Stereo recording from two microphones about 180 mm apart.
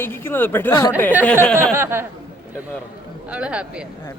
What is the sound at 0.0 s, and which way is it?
Speech, 10° left (ahead or behind).